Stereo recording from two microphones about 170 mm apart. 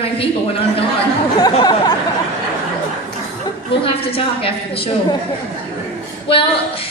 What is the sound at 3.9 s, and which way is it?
A woman's voice, 35° left (ahead or behind).